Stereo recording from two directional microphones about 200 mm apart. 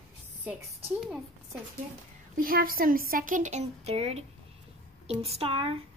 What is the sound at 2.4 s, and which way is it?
A woman's voice, 45° right (ahead or behind).